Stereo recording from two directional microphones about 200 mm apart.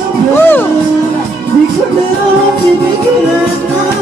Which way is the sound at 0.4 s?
10° left (ahead or behind).